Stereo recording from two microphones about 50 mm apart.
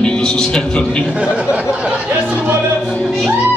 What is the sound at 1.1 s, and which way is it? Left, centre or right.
Speech, centre.